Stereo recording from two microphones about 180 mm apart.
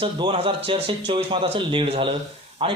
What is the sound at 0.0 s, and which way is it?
A man's voice, 30° right (ahead or behind).